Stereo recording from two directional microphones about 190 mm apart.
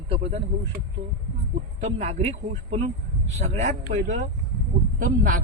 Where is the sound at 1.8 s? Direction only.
35° right (ahead or behind).